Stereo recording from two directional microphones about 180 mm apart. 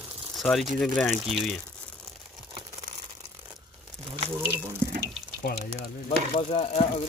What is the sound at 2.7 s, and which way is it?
Crumpling, 35° right (ahead or behind).